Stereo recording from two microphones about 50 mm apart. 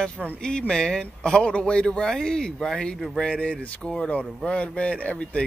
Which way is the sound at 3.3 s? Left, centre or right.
Left.